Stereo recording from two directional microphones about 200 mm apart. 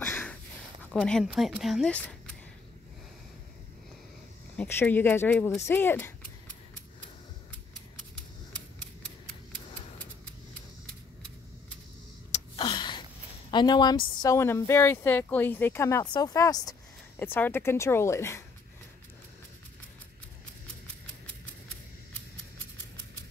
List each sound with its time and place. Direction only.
0.0 s sniff: 10° left (ahead or behind)
0.9 s speech: 5° left (ahead or behind)
4.6 s speech: 10° left (ahead or behind)
12.3 s gasp: 25° left (ahead or behind)
13.5 s speech: 20° left (ahead or behind)